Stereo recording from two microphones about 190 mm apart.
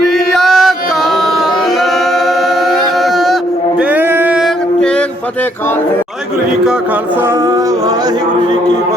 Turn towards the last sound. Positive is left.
turn(degrees=-15)  # may be behind; listen again after turning